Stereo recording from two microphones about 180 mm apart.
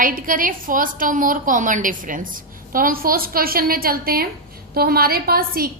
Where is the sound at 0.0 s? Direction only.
50° right (ahead or behind).